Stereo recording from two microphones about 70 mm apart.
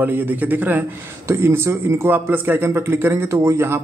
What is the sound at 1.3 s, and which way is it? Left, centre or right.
A man's voice, right.